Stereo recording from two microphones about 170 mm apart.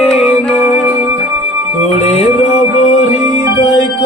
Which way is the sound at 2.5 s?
45° left (ahead or behind).